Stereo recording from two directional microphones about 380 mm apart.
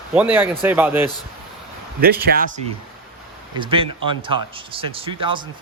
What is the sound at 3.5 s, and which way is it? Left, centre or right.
Speech, centre.